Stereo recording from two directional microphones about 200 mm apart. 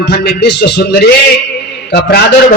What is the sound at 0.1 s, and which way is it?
A man's voice, 55° left (ahead or behind).